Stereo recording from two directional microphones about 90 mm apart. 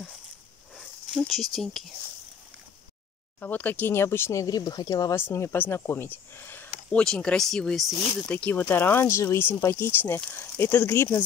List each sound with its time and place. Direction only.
0.7 s speech: centre (ahead or behind)
3.3 s speech: 20° left (ahead or behind); by 5.1 s 45° left (ahead or behind)
5.1 s speech: 30° left (ahead or behind); by 7.8 s 5° left (ahead or behind)
8.3 s speech: 15° left (ahead or behind)